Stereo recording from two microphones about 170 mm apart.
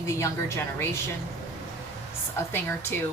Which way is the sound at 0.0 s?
15° left (ahead or behind).